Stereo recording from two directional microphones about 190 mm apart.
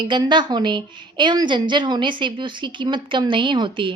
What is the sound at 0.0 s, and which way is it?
A woman's voice, 25° right (ahead or behind).